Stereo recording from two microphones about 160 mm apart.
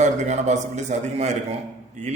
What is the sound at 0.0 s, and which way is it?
A man's voice, 45° right (ahead or behind).